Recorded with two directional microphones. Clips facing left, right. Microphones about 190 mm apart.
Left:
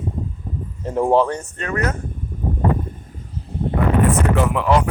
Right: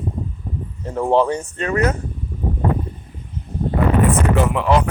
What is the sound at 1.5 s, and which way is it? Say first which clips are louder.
Speech: right 5 dB; 20° right (ahead or behind).